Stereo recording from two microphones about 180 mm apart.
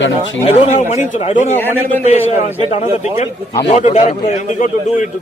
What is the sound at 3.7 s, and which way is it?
Speech, 40° left (ahead or behind).